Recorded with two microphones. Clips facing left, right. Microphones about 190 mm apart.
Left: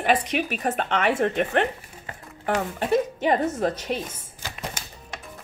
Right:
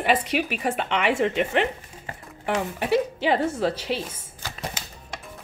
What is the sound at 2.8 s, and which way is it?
Speech, 5° right (ahead or behind).